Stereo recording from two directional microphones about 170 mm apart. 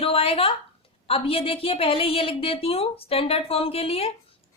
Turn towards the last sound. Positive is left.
turn(degrees=35)  # may be behind; listen again after turning